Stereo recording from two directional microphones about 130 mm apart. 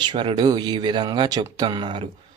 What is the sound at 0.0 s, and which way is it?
Speech, 40° right (ahead or behind).